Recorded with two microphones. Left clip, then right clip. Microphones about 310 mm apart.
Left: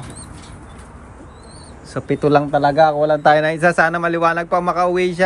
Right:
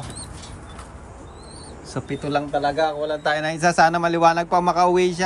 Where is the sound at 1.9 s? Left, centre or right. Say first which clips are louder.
Left 10 dB; centre.